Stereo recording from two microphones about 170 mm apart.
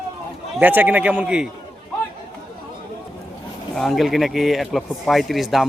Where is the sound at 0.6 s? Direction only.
10° right (ahead or behind).